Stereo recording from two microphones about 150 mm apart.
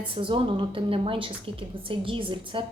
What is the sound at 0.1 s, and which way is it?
A woman's voice, 35° right (ahead or behind).